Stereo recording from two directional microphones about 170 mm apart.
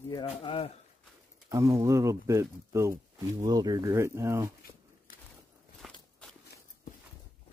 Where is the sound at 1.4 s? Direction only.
20° right (ahead or behind).